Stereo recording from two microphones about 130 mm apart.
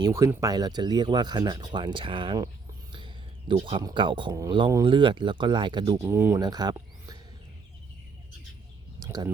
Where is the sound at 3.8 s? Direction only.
35° right (ahead or behind).